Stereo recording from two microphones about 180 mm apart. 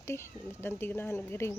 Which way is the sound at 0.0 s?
15° left (ahead or behind).